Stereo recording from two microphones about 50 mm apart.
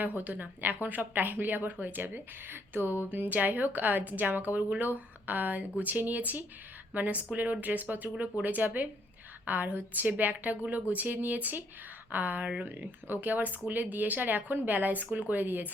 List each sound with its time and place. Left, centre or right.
0.0 s a woman's voice: right